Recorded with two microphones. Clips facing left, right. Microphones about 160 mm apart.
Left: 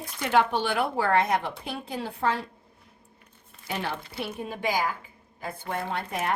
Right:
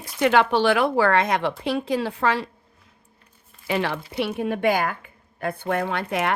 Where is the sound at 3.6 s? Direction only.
90° right.